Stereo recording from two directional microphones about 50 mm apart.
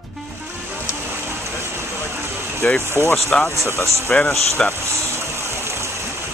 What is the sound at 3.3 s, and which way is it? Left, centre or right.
Speech, centre.